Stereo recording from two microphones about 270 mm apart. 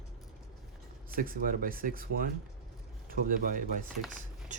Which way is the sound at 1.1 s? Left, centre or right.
Right.